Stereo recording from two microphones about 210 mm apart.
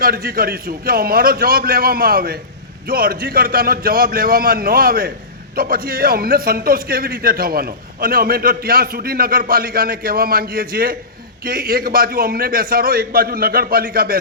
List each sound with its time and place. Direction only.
0.0 s a man's voice: 45° right (ahead or behind)